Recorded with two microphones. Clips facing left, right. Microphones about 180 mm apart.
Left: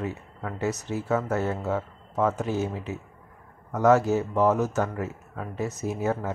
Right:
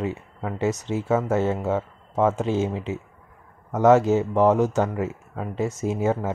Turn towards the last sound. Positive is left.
turn(degrees=-20)  # may be behind; listen again after turning